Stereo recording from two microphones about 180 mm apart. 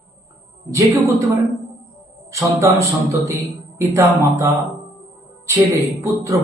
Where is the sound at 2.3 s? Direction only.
15° right (ahead or behind).